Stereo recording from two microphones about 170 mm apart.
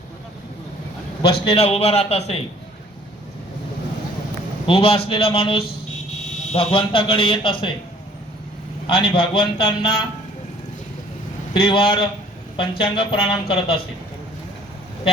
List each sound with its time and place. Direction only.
1.3 s speech: 35° left (ahead or behind)
4.6 s speech: 30° left (ahead or behind)
8.9 s speech: 30° left (ahead or behind)
11.6 s speech: 30° left (ahead or behind)